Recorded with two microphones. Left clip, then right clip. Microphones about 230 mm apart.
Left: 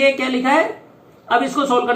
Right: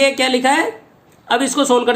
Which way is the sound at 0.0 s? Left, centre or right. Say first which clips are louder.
Right 2 dB; right.